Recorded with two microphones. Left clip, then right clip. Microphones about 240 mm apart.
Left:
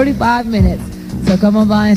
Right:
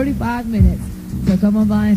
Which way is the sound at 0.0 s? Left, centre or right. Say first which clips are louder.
Left 8 dB; right.